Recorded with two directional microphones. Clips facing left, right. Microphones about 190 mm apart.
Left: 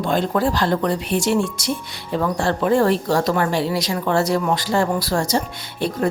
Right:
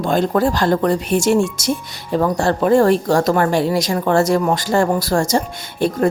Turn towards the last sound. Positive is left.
turn(degrees=-50)  # may be behind; listen again after turning